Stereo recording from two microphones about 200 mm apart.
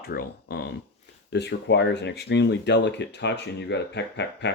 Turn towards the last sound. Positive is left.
turn(degrees=60)  # may be behind; listen again after turning